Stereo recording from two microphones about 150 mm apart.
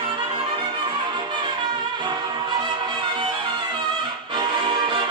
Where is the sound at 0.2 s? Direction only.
35° right (ahead or behind).